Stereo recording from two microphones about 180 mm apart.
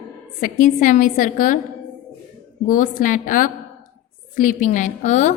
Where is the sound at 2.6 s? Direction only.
45° left (ahead or behind).